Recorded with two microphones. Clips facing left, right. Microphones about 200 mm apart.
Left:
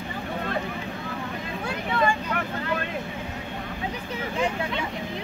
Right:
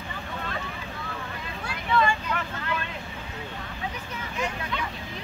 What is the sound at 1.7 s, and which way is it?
Vehicle, 50° left (ahead or behind).